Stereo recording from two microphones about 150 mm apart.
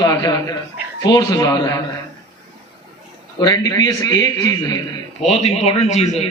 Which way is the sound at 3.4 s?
25° left (ahead or behind).